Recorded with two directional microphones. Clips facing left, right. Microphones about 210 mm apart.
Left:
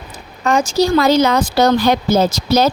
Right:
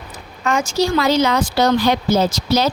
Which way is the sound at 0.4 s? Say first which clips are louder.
Left 4 dB; 35° left (ahead or behind).